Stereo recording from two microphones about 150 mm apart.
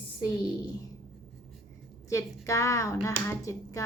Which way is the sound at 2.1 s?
20° left (ahead or behind).